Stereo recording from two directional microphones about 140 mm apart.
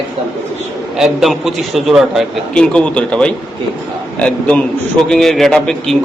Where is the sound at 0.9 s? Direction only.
Centre (ahead or behind).